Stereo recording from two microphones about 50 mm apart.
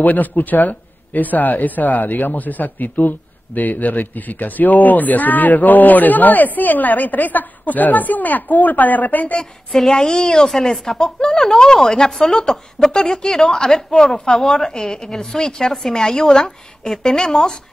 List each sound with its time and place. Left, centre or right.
0.0 s speech: left
9.4 s a woman's voice: centre